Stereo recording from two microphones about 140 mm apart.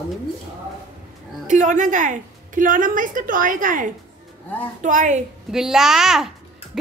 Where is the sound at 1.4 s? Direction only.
60° right (ahead or behind).